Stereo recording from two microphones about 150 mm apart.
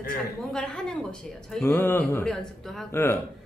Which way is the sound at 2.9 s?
15° left (ahead or behind).